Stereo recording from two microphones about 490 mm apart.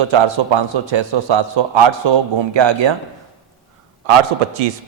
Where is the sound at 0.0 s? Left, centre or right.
Right.